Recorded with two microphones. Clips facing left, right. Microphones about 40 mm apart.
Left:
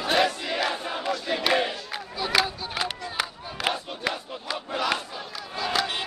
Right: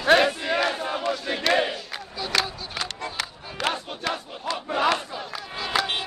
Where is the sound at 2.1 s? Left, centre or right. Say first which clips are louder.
Left 2 dB; centre.